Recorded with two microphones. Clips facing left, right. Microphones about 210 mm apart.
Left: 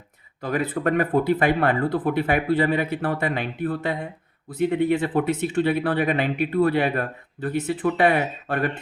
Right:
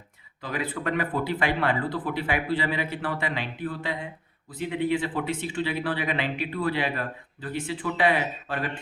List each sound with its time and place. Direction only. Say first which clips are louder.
0.4 s speech: left 6 dB; 45° left (ahead or behind)